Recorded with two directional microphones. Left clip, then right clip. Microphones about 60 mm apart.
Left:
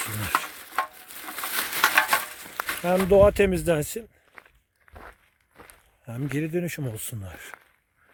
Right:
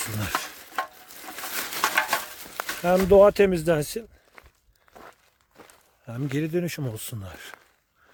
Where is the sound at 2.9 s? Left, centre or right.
Right.